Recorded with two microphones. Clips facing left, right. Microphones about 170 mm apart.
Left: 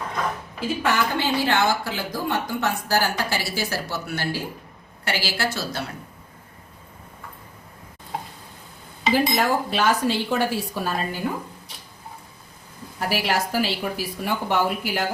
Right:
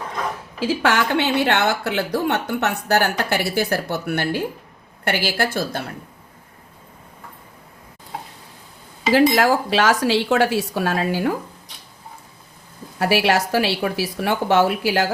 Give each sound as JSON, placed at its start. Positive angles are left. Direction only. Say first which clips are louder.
{"t": 0.6, "sound": "a woman's voice", "louder": "right 4 dB", "side_deg": -90}
{"t": 9.1, "sound": "speech", "louder": "right 6 dB", "side_deg": -90}
{"t": 13.0, "sound": "a woman's voice", "louder": "right 6 dB", "side_deg": -75}